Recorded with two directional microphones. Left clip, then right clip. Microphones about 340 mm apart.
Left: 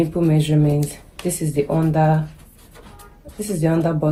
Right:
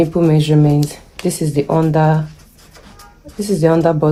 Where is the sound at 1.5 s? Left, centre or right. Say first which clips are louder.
Right 4 dB; right.